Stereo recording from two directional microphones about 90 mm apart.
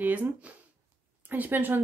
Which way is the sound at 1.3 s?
20° right (ahead or behind).